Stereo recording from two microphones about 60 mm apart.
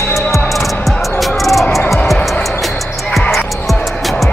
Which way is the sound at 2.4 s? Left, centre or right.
Centre.